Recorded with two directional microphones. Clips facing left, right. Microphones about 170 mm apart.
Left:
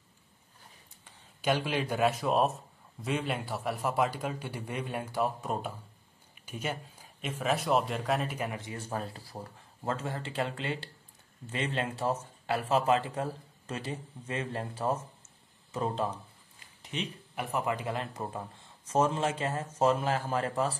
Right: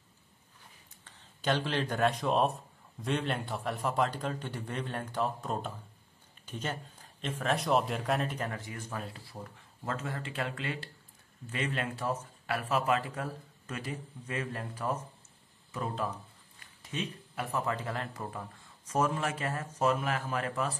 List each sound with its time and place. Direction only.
1.0 s a man's voice: 10° left (ahead or behind)
8.5 s speech: 25° left (ahead or behind)